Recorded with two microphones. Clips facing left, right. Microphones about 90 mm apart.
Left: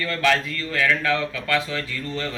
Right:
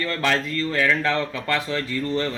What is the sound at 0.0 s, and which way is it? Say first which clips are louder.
Speech: left 1 dB; 30° right (ahead or behind).